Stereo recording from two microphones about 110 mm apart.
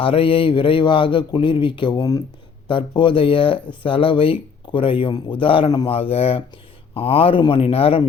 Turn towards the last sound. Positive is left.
turn(degrees=55)  # may be behind; listen again after turning